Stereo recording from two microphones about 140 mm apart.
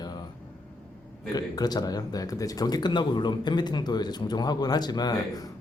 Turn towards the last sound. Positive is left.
turn(degrees=30)  # may be behind; listen again after turning